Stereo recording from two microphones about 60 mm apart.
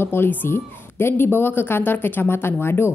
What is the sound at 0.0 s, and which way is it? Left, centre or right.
A woman's voice, left.